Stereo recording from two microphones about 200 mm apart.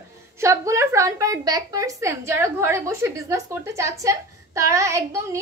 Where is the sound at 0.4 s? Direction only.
15° right (ahead or behind).